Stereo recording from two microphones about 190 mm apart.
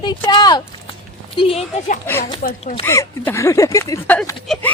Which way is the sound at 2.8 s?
15° left (ahead or behind).